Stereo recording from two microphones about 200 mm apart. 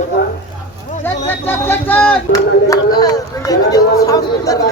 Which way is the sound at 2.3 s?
20° left (ahead or behind).